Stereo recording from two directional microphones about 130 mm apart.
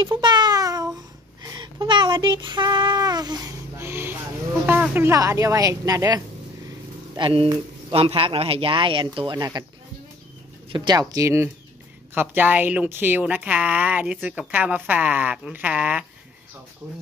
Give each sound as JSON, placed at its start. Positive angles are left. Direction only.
{"t": 0.2, "sound": "meow", "side_deg": -35}
{"t": 1.4, "sound": "a sound", "side_deg": -30}
{"t": 3.7, "sound": "a woman's voice", "side_deg": -20}
{"t": 7.2, "sound": "speech", "side_deg": -40}
{"t": 10.7, "sound": "a woman's voice", "side_deg": -30}